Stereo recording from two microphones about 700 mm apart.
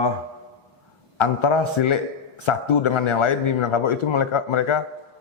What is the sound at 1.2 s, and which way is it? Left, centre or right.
A man's voice, left.